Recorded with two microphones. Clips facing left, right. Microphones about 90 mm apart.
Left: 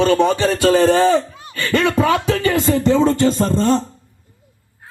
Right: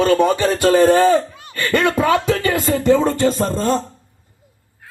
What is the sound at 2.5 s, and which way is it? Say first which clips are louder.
Speech: even; 5° right (ahead or behind).